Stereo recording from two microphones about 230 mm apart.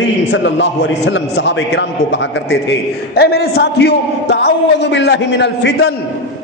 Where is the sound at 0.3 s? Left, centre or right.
Left.